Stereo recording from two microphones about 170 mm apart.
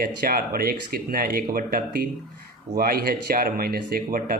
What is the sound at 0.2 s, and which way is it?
Speech, 60° right (ahead or behind).